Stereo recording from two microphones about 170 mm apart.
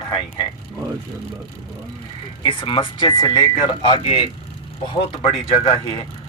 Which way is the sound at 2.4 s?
30° left (ahead or behind).